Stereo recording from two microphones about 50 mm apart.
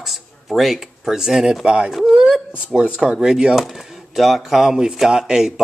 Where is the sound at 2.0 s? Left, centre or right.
Centre.